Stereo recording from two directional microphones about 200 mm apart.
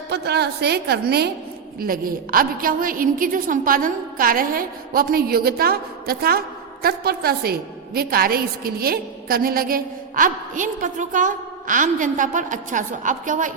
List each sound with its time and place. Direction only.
0.1 s a woman's voice: 55° right (ahead or behind); by 13.5 s 40° right (ahead or behind)